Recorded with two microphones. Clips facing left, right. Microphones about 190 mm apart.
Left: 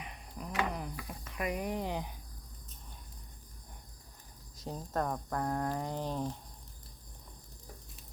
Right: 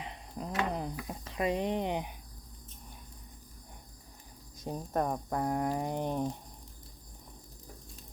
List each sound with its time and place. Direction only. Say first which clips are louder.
0.0 s a sound: right 4 dB; 30° right (ahead or behind)
1.0 s speech: right 5 dB; 25° right (ahead or behind)
4.6 s speech: right 3 dB; 15° right (ahead or behind)